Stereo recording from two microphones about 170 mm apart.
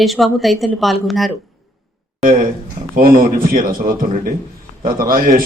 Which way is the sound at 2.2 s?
55° right (ahead or behind).